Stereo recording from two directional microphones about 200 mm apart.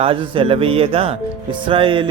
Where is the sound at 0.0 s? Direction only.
25° right (ahead or behind).